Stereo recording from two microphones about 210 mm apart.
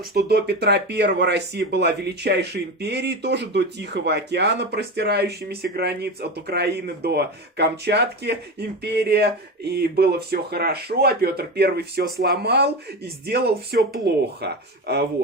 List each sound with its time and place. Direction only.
0.1 s speech: 50° right (ahead or behind)